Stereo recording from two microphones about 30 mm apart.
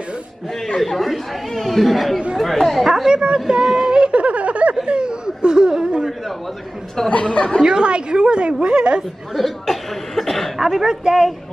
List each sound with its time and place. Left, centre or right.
0.9 s speech: centre
2.8 s speech: centre
3.1 s a woman's voice: right
3.6 s speech: centre
4.1 s a sound: right
4.8 s a sound: right
7.1 s speech: left
7.6 s a woman's voice: right
9.3 s speech: centre
10.6 s speech: centre
10.9 s a woman's voice: right